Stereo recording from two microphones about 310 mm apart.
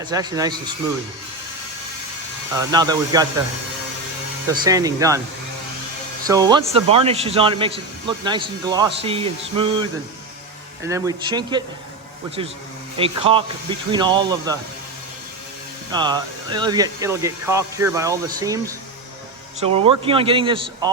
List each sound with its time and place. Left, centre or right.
0.0 s a man's voice: centre
2.6 s a man's voice: centre
4.4 s a man's voice: centre
6.2 s a man's voice: centre
10.8 s a man's voice: centre
13.0 s a man's voice: centre
15.9 s a man's voice: centre